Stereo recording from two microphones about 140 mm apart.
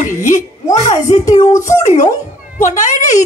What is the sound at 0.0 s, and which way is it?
Speech, 65° left (ahead or behind).